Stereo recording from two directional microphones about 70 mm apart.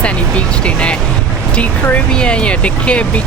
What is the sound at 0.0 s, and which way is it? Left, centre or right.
Speech, centre.